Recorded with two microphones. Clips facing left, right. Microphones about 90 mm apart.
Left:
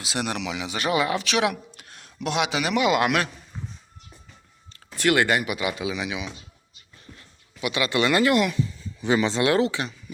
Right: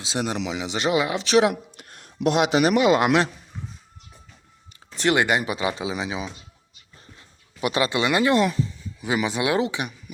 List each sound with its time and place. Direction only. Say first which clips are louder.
0.0 s speech: right 2 dB; 25° right (ahead or behind)
1.3 s speech: right 9 dB; 30° right (ahead or behind)
1.7 s a man's voice: right 2 dB; 45° right (ahead or behind); by 3.2 s 25° right (ahead or behind)
4.9 s speech: even; 20° right (ahead or behind)
7.6 s speech: right 3 dB; 40° right (ahead or behind)
7.9 s speech: left 2 dB; 20° right (ahead or behind)
9.0 s speech: left 2 dB; 10° right (ahead or behind)